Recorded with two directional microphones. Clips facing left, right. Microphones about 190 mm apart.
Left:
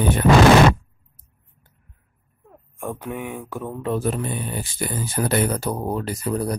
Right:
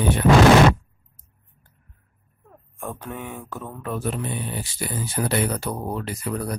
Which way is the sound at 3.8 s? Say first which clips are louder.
Left 6 dB; 30° left (ahead or behind).